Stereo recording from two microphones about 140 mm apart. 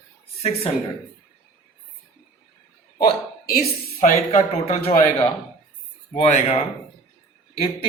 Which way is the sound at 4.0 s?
65° left (ahead or behind).